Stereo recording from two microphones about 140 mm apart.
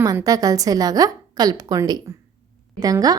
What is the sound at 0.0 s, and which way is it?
A woman's voice, 25° right (ahead or behind).